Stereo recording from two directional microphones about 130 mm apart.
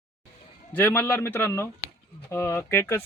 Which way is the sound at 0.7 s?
15° left (ahead or behind).